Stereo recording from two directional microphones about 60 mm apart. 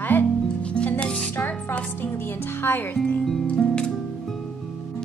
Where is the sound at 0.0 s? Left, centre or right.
Left.